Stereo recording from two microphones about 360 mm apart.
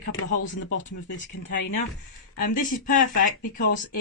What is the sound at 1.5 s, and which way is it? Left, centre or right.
Speech, left.